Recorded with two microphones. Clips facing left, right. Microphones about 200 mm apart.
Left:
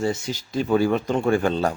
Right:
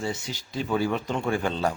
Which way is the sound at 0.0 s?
45° left (ahead or behind).